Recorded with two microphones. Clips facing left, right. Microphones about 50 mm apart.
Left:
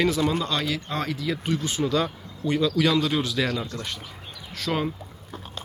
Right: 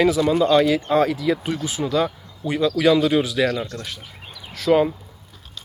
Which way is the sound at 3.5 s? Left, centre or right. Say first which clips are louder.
Right 4 dB; right.